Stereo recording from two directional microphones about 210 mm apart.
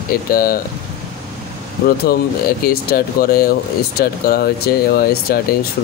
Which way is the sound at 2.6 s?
45° left (ahead or behind).